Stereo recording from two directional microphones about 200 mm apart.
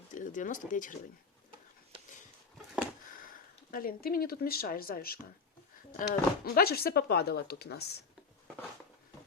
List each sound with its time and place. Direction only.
0.1 s speech: 40° left (ahead or behind)
3.2 s speech: 45° left (ahead or behind)